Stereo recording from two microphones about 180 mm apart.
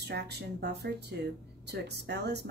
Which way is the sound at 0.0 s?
65° right (ahead or behind).